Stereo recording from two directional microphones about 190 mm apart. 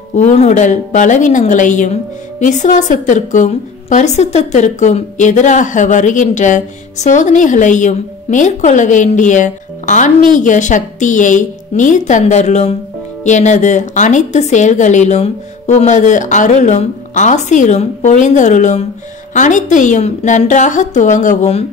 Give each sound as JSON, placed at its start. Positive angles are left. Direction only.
{"t": 0.1, "sound": "a woman's voice", "side_deg": 40}